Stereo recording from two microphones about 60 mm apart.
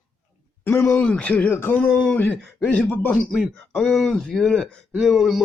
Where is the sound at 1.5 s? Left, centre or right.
Left.